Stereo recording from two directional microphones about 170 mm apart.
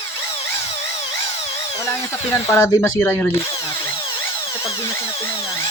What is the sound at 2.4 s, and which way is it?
Speech, 15° left (ahead or behind).